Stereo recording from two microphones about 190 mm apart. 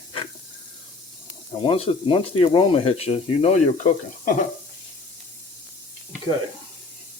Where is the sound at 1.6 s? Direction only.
30° left (ahead or behind).